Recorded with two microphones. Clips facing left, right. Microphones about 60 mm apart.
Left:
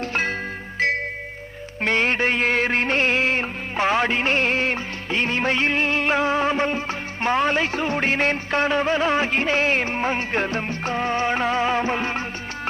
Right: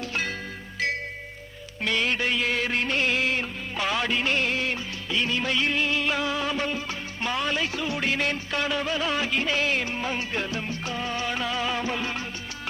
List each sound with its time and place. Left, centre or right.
0.0 s music: left
1.8 s music: left